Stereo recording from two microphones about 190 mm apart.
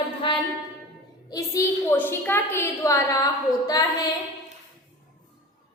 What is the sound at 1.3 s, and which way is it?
A woman's voice, 15° left (ahead or behind).